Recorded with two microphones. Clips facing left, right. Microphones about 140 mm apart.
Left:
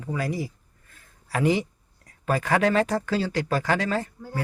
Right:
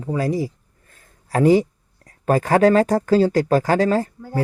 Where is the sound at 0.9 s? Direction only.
40° right (ahead or behind).